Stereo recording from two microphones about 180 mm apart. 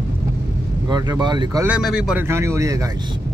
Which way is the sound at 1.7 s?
5° right (ahead or behind).